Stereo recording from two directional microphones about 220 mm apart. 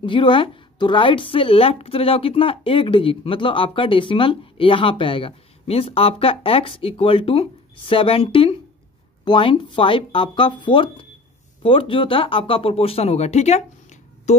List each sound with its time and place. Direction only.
0.0 s a woman's voice: 20° left (ahead or behind)